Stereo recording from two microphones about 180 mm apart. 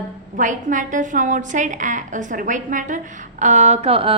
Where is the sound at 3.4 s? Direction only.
40° right (ahead or behind).